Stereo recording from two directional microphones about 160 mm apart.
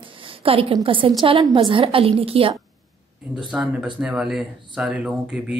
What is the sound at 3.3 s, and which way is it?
Speech, 5° right (ahead or behind).